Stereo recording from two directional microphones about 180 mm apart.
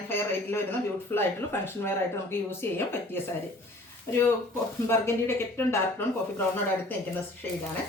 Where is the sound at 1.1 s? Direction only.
10° left (ahead or behind).